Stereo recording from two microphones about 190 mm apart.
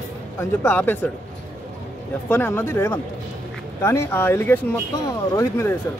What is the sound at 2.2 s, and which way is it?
Speech, 10° left (ahead or behind).